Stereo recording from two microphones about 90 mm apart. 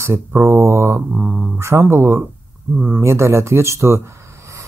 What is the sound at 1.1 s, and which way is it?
Speech, 10° right (ahead or behind).